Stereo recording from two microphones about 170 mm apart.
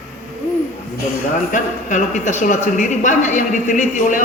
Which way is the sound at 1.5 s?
45° left (ahead or behind).